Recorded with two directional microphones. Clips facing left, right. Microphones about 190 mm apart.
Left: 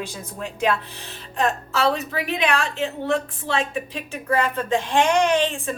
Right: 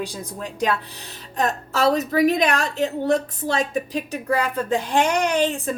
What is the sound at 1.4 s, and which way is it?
A woman's voice, 40° right (ahead or behind).